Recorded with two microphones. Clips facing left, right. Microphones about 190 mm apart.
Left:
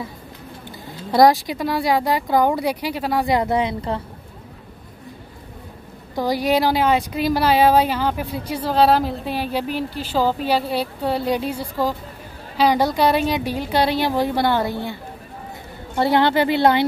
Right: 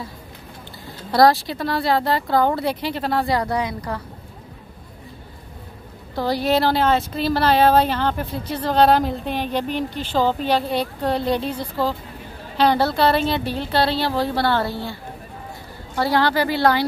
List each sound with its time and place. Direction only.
1.1 s a woman's voice: 15° left (ahead or behind)
6.1 s a woman's voice: 10° left (ahead or behind)
16.0 s a woman's voice: 20° left (ahead or behind)